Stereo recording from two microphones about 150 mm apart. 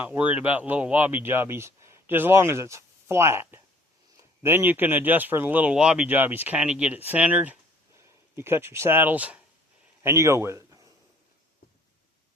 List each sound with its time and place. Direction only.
0.0 s a man's voice: 10° right (ahead or behind)